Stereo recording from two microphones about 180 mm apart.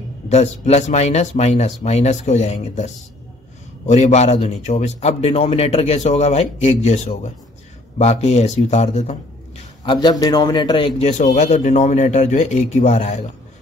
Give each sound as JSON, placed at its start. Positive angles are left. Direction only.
{"t": 0.3, "sound": "a man's voice", "side_deg": 40}
{"t": 9.8, "sound": "a man's voice", "side_deg": 25}
{"t": 11.0, "sound": "a man's voice", "side_deg": 40}